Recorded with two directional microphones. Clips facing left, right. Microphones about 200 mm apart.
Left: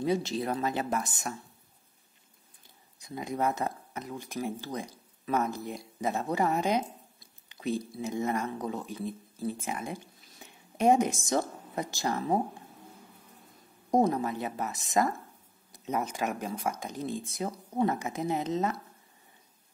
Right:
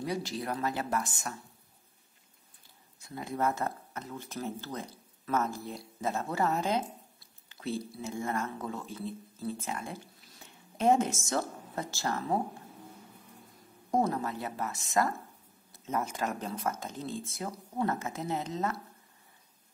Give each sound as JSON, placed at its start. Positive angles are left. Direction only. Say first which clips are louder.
{"t": 0.0, "sound": "speech", "louder": "left 5 dB", "side_deg": 25}
{"t": 3.0, "sound": "speech", "louder": "left 1 dB", "side_deg": 15}
{"t": 13.8, "sound": "speech", "louder": "left 4 dB", "side_deg": 20}